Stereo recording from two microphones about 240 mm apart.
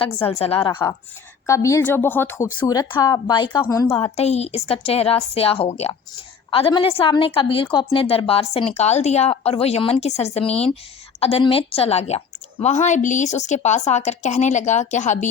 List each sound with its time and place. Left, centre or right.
0.3 s a woman's voice: left
3.9 s a woman's voice: left